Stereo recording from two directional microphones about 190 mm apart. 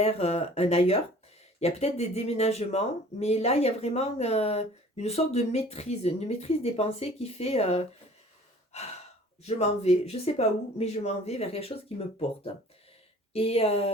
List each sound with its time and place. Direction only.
0.0 s speech: 35° left (ahead or behind)
8.7 s gasp: 35° left (ahead or behind)
9.4 s speech: 35° left (ahead or behind)